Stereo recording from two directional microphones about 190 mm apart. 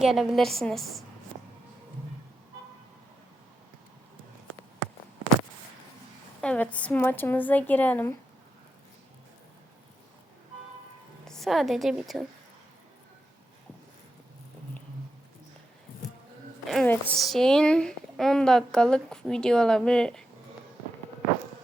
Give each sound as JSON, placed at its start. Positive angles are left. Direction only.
{"t": 0.0, "sound": "a woman's voice", "side_deg": 0}
{"t": 6.4, "sound": "a woman's voice", "side_deg": 5}
{"t": 11.3, "sound": "a woman's voice", "side_deg": 0}
{"t": 16.6, "sound": "a woman's voice", "side_deg": 5}